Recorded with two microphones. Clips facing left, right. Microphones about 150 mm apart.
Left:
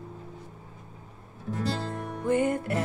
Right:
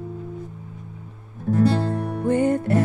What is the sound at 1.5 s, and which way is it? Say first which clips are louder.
Music: right 13 dB; 50° right (ahead or behind).